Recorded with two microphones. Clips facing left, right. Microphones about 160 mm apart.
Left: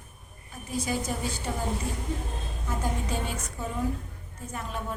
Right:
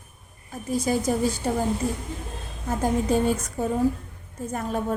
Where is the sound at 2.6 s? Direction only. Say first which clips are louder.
Right 9 dB; 40° right (ahead or behind).